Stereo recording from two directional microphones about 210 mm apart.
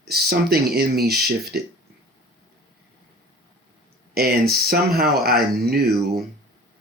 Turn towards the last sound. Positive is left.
turn(degrees=-50)  # may be behind; listen again after turning